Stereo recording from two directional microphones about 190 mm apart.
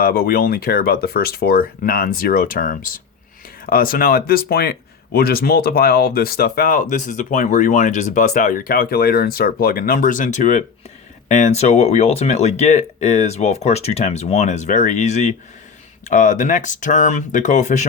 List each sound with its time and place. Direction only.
0.0 s speech: 50° left (ahead or behind)